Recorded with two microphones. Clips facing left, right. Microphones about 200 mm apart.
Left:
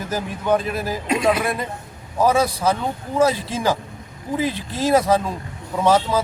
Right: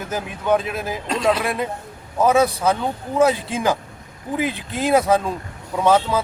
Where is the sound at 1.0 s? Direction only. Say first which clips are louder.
Left 1 dB; 10° left (ahead or behind).